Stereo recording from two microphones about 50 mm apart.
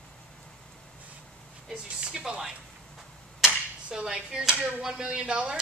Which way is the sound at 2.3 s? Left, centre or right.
Centre.